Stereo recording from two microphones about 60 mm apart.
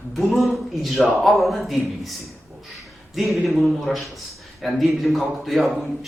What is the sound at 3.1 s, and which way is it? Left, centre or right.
A man's voice, centre.